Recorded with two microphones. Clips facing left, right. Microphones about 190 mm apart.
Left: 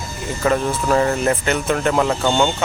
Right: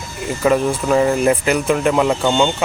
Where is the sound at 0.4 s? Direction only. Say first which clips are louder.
Right 3 dB; 5° right (ahead or behind).